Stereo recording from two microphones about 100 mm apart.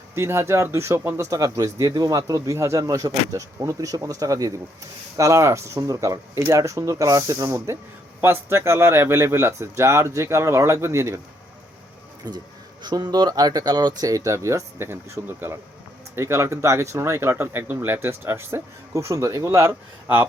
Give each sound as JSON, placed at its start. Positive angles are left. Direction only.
{"t": 0.1, "sound": "speech", "side_deg": -25}
{"t": 12.2, "sound": "speech", "side_deg": -40}